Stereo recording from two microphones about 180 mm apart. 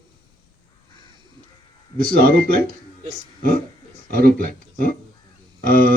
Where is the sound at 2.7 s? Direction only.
50° right (ahead or behind).